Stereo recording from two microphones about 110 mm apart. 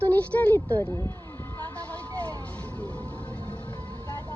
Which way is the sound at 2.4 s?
15° left (ahead or behind).